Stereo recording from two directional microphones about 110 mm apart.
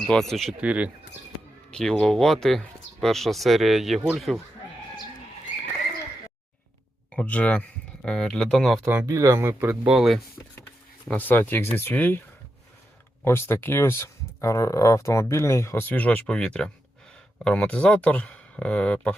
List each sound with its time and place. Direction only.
0.1 s speech: 5° left (ahead or behind)
0.6 s speech: 10° right (ahead or behind)
1.7 s speech: 5° left (ahead or behind)
7.2 s speech: 15° left (ahead or behind)
9.0 s speech: 30° right (ahead or behind)
9.8 s speech: 5° right (ahead or behind)
11.1 s speech: 15° left (ahead or behind)
13.2 s speech: 20° left (ahead or behind)